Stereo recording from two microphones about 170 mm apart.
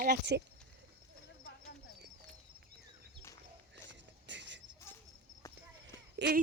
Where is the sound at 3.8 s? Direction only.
90° right.